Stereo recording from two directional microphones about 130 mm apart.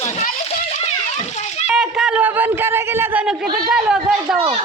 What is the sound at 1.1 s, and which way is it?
Children playing, 60° left (ahead or behind).